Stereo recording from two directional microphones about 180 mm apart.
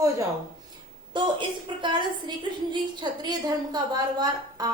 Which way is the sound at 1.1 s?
25° right (ahead or behind).